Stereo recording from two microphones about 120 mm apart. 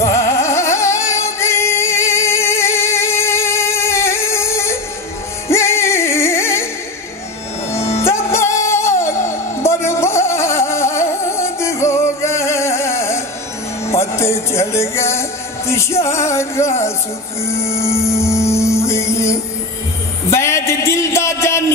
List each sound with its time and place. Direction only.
0.0 s music: 25° left (ahead or behind)
7.7 s music: 25° left (ahead or behind)
20.2 s a sound: 25° left (ahead or behind)